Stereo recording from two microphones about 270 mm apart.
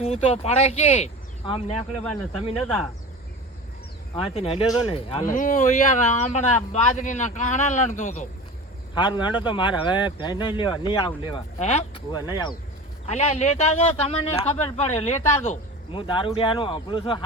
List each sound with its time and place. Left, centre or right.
0.0 s speech: left
4.1 s speech: left
9.0 s speech: centre